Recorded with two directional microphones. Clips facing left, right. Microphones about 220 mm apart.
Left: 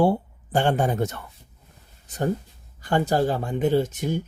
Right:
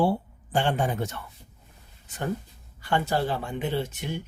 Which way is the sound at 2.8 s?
40° left (ahead or behind).